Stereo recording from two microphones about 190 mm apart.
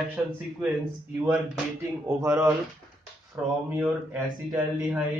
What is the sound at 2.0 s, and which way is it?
Speech, 15° right (ahead or behind).